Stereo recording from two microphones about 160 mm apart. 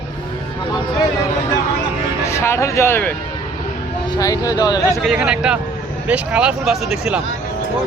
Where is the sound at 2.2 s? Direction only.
15° left (ahead or behind).